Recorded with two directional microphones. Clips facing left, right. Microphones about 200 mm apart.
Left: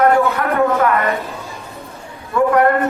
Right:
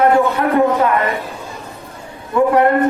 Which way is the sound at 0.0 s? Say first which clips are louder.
Right 1 dB; 25° right (ahead or behind).